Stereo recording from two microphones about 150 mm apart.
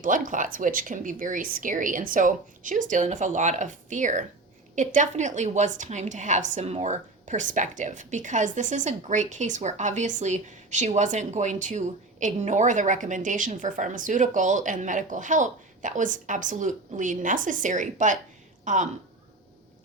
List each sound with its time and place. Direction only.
0.0 s a woman's voice: 60° right (ahead or behind)